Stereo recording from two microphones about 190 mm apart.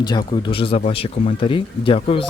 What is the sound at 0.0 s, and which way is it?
Speech, 25° left (ahead or behind).